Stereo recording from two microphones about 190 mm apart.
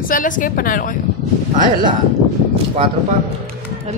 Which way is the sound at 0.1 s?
45° left (ahead or behind).